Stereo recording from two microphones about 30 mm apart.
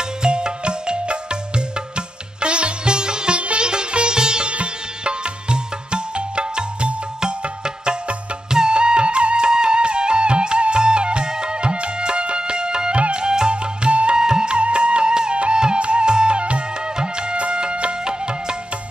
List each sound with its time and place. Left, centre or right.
0.2 s music: right
2.0 s sitar: right
3.3 s sitar: right
4.5 s music: right
12.9 s music: right
13.2 s music: right
13.8 s music: right
14.2 s music: right
14.5 s music: right